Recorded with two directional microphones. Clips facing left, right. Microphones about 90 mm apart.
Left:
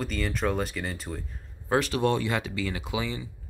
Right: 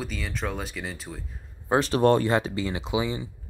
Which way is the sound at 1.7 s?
30° right (ahead or behind).